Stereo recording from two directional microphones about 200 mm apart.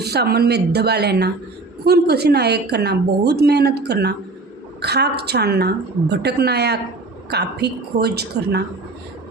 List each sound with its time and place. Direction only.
0.0 s a woman's voice: 55° right (ahead or behind)